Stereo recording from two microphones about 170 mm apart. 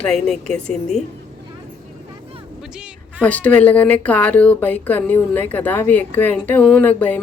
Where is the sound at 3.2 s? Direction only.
10° left (ahead or behind).